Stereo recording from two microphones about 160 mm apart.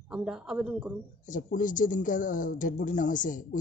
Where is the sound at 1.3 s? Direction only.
55° left (ahead or behind).